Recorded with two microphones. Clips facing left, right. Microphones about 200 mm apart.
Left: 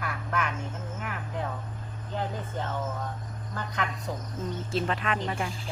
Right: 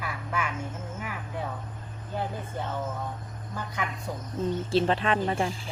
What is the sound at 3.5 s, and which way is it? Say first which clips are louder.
Speech: left 1 dB; 10° right (ahead or behind).